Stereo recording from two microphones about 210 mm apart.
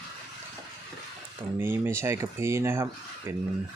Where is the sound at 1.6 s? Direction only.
10° right (ahead or behind).